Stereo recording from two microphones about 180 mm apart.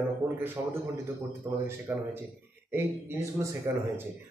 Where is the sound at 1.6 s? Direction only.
15° right (ahead or behind).